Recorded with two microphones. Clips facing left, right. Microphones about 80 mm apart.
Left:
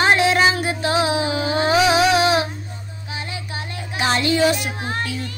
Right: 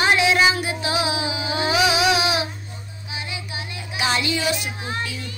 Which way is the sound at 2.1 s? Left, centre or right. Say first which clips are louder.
Left 5 dB; left.